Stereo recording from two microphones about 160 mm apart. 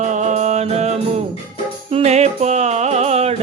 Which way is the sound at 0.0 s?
50° right (ahead or behind).